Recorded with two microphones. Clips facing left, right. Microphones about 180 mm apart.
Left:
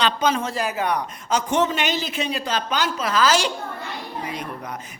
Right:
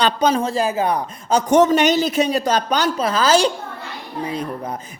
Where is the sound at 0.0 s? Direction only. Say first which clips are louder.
Right 4 dB; 35° right (ahead or behind).